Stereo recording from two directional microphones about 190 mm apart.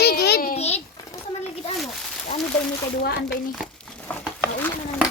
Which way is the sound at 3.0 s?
65° left (ahead or behind).